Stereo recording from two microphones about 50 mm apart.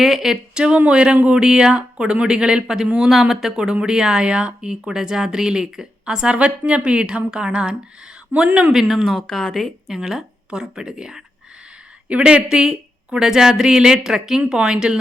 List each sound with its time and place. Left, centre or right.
0.0 s speech: centre
0.9 s speech: right
3.1 s speech: centre
8.4 s speech: right
8.7 s speech: centre
9.0 s speech: centre
9.9 s speech: centre
10.5 s speech: centre